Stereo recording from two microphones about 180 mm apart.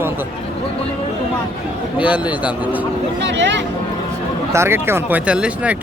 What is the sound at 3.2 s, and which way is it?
Speech, 90° right.